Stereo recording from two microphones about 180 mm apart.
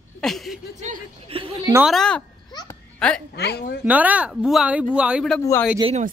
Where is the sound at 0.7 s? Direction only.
35° right (ahead or behind).